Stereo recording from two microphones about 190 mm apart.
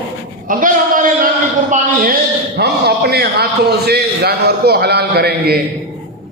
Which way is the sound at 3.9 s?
55° right (ahead or behind).